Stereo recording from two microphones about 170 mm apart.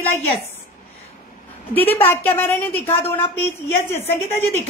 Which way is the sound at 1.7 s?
10° left (ahead or behind).